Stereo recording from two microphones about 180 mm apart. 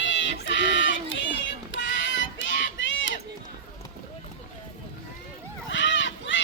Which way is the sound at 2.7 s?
90° left.